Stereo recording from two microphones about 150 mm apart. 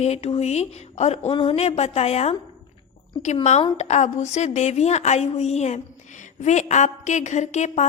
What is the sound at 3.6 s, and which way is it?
A woman's voice, 45° left (ahead or behind).